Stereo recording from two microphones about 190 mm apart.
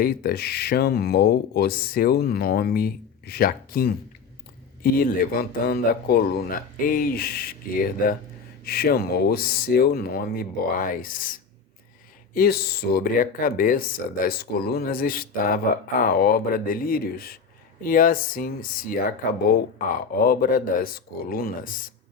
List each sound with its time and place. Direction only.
0.0 s speech: 50° left (ahead or behind)
8.6 s speech: 55° left (ahead or behind)
20.1 s speech: 50° left (ahead or behind)